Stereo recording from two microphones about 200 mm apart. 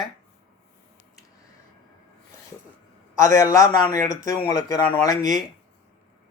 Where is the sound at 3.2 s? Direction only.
15° left (ahead or behind).